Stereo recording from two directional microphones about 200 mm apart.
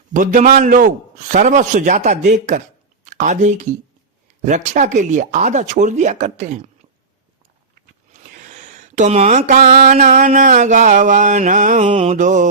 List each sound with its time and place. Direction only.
0.1 s a man's voice: 40° right (ahead or behind)
8.1 s a sound: 40° right (ahead or behind)
9.6 s a man's voice: 40° right (ahead or behind)
11.9 s a man's voice: 30° right (ahead or behind)